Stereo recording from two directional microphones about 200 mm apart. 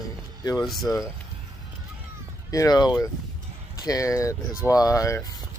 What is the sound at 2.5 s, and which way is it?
Speech, 20° left (ahead or behind).